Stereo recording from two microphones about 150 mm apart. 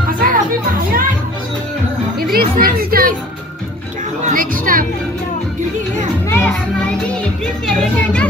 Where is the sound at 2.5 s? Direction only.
75° right (ahead or behind).